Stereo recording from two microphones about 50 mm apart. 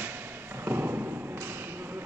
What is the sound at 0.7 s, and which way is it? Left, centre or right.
Thump, right.